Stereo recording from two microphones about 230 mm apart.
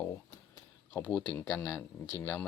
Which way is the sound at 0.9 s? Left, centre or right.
Centre.